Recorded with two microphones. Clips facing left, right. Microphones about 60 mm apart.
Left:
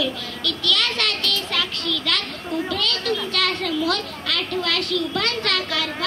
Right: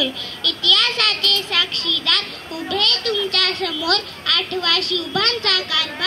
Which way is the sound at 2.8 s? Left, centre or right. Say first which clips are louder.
Right 2 dB; right.